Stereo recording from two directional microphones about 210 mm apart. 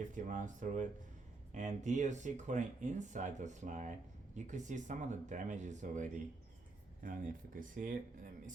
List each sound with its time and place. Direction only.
0.1 s speech: 35° right (ahead or behind)